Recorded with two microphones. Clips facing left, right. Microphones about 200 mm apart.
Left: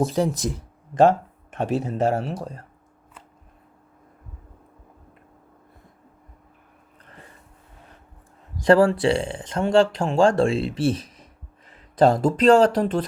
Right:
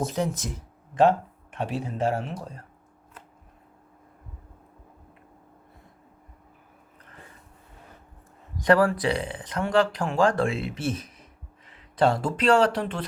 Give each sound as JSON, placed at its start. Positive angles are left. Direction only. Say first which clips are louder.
{"t": 0.0, "sound": "speech", "louder": "left 6 dB", "side_deg": 35}
{"t": 8.5, "sound": "speech", "louder": "left 4 dB", "side_deg": 30}